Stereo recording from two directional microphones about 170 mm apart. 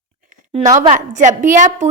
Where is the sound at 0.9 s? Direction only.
50° right (ahead or behind).